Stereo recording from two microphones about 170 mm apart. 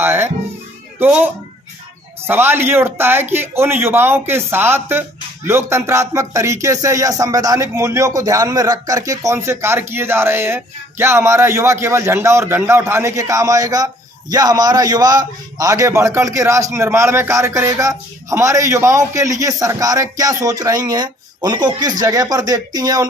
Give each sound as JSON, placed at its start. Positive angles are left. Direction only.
{"t": 0.0, "sound": "a man's voice", "side_deg": -15}
{"t": 2.2, "sound": "a man's voice", "side_deg": -10}